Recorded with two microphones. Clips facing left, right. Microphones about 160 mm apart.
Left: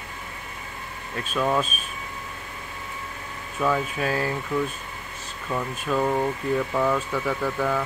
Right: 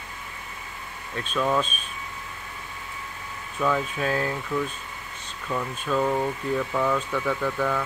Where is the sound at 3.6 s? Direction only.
5° left (ahead or behind).